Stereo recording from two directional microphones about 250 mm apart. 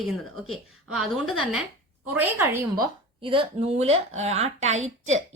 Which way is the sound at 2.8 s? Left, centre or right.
Centre.